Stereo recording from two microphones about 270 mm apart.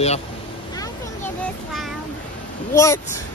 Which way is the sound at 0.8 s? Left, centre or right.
Centre.